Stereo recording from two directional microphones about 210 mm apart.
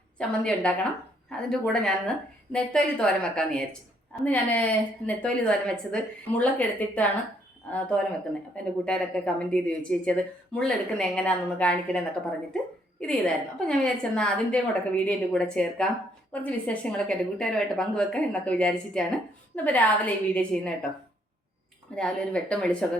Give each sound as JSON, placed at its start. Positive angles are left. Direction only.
{"t": 0.2, "sound": "a woman's voice", "side_deg": 5}
{"t": 21.9, "sound": "speech", "side_deg": 5}